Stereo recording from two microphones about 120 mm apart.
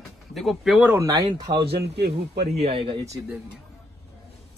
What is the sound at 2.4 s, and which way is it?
Speech, 60° right (ahead or behind).